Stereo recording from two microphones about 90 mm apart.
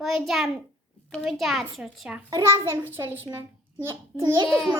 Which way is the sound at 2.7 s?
25° right (ahead or behind).